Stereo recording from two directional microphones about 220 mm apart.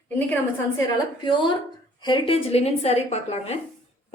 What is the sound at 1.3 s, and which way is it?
A woman's voice, 20° left (ahead or behind).